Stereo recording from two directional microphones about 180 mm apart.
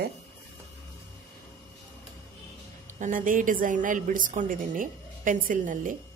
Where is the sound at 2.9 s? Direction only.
45° right (ahead or behind).